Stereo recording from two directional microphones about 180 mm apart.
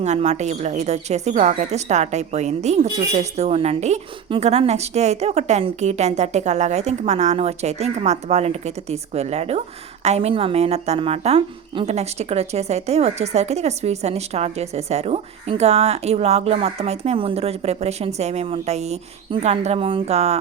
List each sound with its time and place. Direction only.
0.0 s a woman's voice: 40° right (ahead or behind)